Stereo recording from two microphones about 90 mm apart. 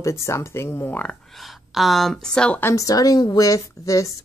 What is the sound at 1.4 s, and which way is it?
Speech, centre (ahead or behind).